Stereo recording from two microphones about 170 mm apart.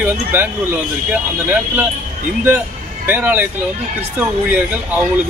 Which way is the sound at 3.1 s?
10° right (ahead or behind).